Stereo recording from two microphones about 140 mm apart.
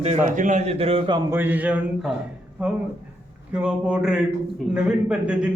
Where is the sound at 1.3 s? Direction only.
15° right (ahead or behind).